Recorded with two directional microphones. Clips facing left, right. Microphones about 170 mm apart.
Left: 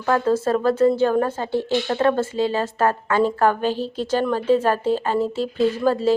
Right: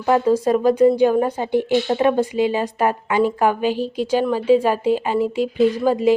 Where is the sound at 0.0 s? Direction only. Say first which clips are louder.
Right 3 dB; 15° right (ahead or behind).